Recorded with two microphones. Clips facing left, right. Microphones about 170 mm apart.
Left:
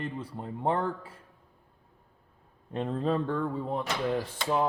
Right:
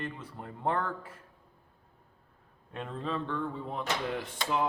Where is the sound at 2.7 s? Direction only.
35° left (ahead or behind).